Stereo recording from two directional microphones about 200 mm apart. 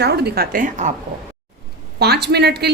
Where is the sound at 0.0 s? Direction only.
55° right (ahead or behind); by 0.9 s 40° right (ahead or behind).